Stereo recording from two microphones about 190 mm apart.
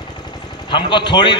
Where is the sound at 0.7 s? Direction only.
25° left (ahead or behind).